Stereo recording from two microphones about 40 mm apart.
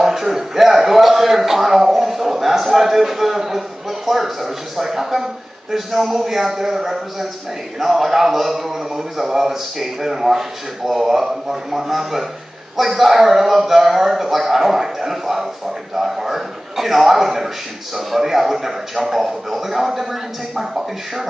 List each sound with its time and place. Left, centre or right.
0.0 s a man's voice: centre